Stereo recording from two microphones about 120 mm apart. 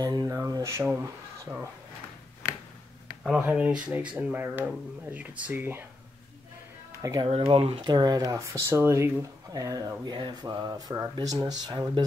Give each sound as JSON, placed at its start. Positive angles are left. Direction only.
{"t": 0.0, "sound": "speech", "side_deg": -30}
{"t": 3.3, "sound": "speech", "side_deg": -10}
{"t": 7.0, "sound": "speech", "side_deg": -30}
{"t": 7.2, "sound": "speech", "side_deg": -50}